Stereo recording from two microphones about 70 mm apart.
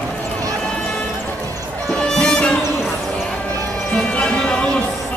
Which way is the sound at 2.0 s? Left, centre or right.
Centre.